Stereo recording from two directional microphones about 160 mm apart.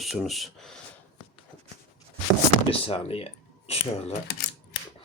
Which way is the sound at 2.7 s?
35° left (ahead or behind).